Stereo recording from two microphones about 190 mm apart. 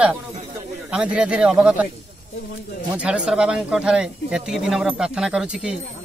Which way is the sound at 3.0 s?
5° right (ahead or behind).